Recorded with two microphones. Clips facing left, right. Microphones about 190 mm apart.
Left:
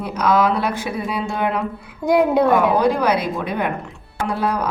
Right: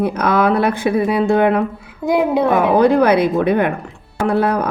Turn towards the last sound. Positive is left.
turn(degrees=-55)  # may be behind; listen again after turning